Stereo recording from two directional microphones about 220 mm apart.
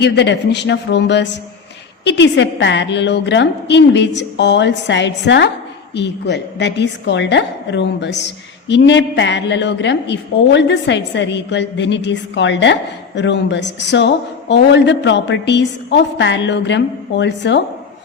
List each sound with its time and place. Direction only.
0.0 s a woman's voice: 50° left (ahead or behind)